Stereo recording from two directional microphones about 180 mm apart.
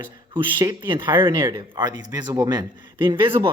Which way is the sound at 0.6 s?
20° right (ahead or behind).